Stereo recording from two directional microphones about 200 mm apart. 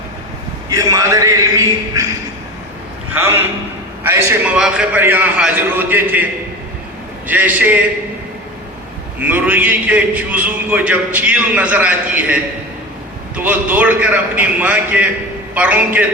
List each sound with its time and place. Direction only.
0.7 s a man's voice: 15° right (ahead or behind)
3.2 s a man's voice: 10° right (ahead or behind)
7.3 s a man's voice: 10° right (ahead or behind)
9.2 s a man's voice: 10° right (ahead or behind)